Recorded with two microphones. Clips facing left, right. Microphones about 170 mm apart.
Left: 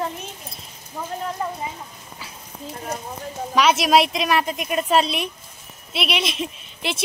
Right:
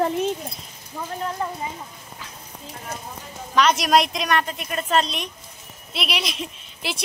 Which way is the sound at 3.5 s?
5° left (ahead or behind).